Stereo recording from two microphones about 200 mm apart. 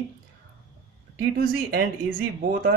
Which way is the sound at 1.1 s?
50° right (ahead or behind).